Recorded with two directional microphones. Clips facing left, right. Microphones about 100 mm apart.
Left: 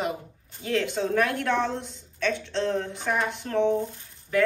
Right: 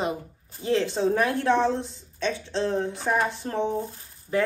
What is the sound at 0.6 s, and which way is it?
A woman's voice, 25° right (ahead or behind).